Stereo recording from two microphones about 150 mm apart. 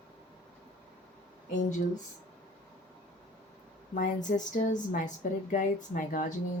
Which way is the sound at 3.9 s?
55° left (ahead or behind).